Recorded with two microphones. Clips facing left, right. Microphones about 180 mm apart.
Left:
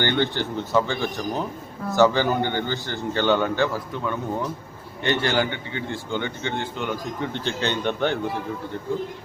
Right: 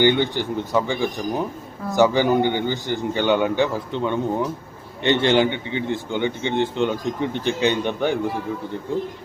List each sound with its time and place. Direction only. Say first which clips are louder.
0.0 s a man's voice: right 5 dB; 15° right (ahead or behind)